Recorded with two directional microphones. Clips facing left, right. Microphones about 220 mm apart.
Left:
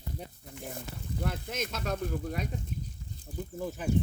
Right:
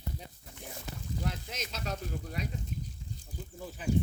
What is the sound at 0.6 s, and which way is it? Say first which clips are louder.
Speech: left 2 dB; 55° left (ahead or behind).